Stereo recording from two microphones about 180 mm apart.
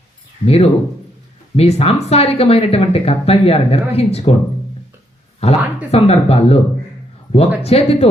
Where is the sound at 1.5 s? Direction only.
35° left (ahead or behind).